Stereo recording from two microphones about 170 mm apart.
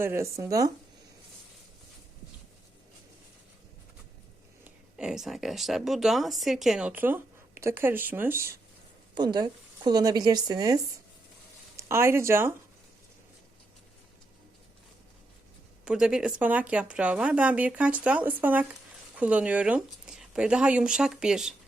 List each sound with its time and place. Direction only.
0.0 s speech: 15° right (ahead or behind)
4.9 s speech: 5° right (ahead or behind)
9.1 s speech: 25° right (ahead or behind)
11.8 s speech: 15° right (ahead or behind)
15.8 s speech: 5° right (ahead or behind)